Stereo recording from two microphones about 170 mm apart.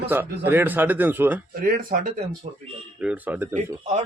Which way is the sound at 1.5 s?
60° right (ahead or behind).